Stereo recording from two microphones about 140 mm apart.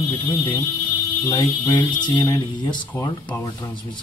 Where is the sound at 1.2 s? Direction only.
30° left (ahead or behind).